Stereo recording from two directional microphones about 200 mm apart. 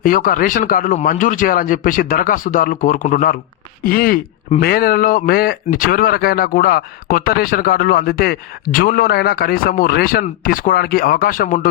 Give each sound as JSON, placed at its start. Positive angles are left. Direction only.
{"t": 0.0, "sound": "speech", "side_deg": 45}